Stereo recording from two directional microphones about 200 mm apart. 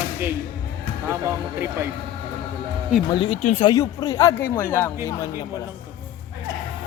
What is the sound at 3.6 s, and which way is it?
Speech, 20° left (ahead or behind).